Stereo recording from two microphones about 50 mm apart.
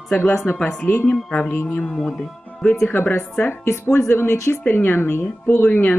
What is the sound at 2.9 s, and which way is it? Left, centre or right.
Speech, left.